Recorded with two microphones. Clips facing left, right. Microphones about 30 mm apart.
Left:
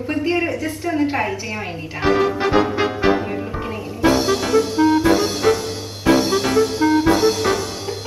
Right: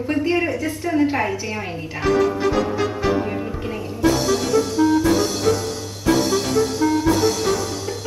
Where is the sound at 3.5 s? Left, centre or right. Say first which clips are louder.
Left 1 dB; centre.